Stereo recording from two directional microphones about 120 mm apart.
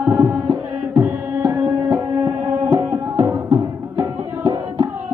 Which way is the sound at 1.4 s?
25° right (ahead or behind).